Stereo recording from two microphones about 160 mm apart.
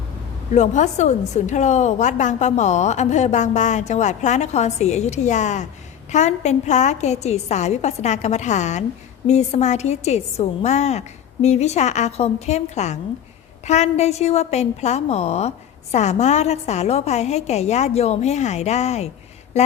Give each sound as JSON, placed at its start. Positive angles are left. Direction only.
{"t": 0.5, "sound": "a woman's voice", "side_deg": 50}